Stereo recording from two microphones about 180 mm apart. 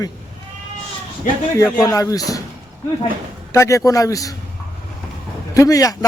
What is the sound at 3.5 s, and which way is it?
Speech, 15° left (ahead or behind).